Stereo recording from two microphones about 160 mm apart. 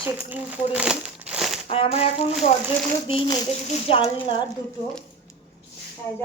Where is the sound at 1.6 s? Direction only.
35° left (ahead or behind).